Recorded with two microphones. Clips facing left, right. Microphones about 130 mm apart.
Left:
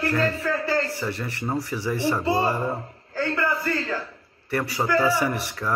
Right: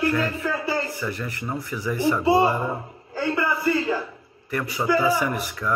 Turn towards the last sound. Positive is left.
turn(degrees=30)  # may be behind; listen again after turning